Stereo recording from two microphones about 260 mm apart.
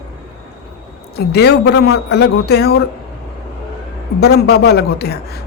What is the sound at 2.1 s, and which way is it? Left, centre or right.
Speech, left.